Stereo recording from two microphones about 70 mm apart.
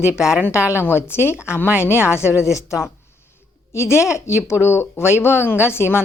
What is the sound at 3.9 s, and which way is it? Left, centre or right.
A woman's voice, left.